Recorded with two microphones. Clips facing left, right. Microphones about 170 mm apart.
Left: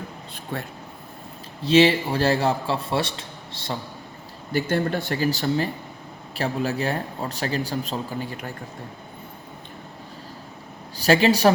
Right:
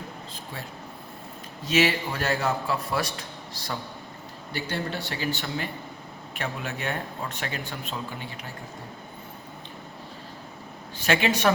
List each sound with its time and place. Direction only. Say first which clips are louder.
0.5 s speech: left 9 dB; 60° left (ahead or behind)
1.6 s a man's voice: left 7 dB; 30° left (ahead or behind)
4.5 s speech: left 8 dB; 45° left (ahead or behind)
10.9 s speech: left 6 dB; 35° left (ahead or behind)